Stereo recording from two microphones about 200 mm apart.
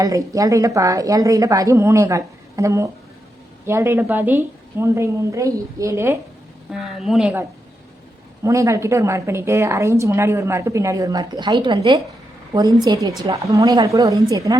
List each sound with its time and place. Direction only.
0.0 s a woman's voice: 15° right (ahead or behind)
6.7 s speech: centre (ahead or behind)
8.4 s a woman's voice: 15° right (ahead or behind)